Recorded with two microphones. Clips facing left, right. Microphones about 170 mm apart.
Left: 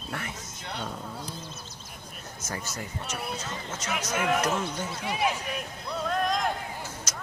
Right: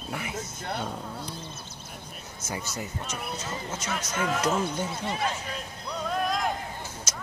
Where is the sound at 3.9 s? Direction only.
10° left (ahead or behind).